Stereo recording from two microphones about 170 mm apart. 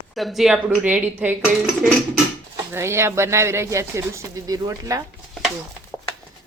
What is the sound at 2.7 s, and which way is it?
Speech, 15° right (ahead or behind).